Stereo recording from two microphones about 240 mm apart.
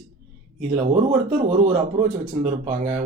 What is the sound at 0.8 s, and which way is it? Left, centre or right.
Speech, right.